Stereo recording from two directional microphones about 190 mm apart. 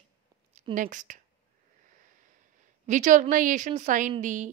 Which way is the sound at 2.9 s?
40° right (ahead or behind).